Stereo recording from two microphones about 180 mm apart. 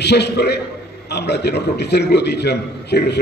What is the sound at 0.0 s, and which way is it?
A man's voice, 70° left (ahead or behind).